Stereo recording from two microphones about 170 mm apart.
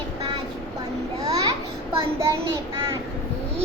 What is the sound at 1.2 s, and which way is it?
Babbling, 20° right (ahead or behind).